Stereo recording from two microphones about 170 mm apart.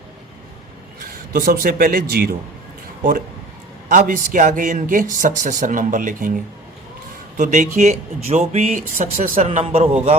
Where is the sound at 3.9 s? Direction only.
50° right (ahead or behind).